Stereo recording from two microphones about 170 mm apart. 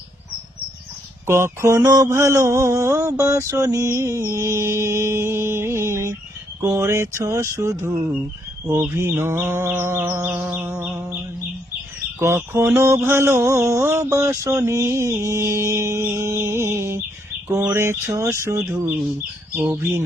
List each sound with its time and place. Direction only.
1.3 s mantra: 15° right (ahead or behind)
12.2 s mantra: 15° right (ahead or behind)